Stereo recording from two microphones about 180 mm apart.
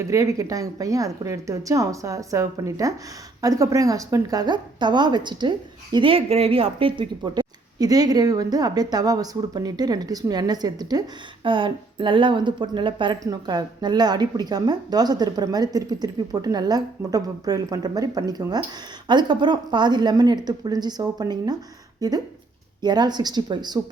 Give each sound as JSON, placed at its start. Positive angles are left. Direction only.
{"t": 0.0, "sound": "a woman's voice", "side_deg": -15}